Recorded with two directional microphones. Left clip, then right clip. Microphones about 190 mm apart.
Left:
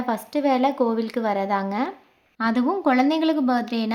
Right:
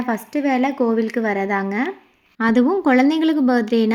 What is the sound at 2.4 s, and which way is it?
Speech, 15° right (ahead or behind).